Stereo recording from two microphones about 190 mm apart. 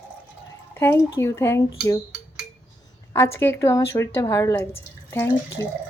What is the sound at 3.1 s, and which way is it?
Speech, 15° left (ahead or behind).